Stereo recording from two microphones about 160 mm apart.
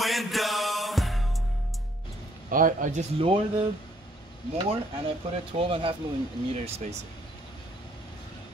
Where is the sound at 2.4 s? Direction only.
55° right (ahead or behind).